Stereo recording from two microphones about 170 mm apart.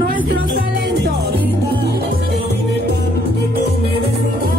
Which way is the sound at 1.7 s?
70° right (ahead or behind).